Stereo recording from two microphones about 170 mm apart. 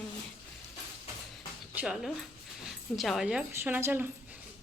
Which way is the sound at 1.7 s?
5° right (ahead or behind).